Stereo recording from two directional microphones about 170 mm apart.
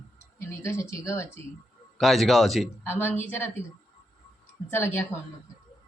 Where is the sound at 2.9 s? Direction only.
10° left (ahead or behind).